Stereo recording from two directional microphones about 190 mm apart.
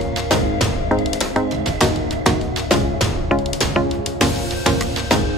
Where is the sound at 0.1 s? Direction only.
Centre (ahead or behind).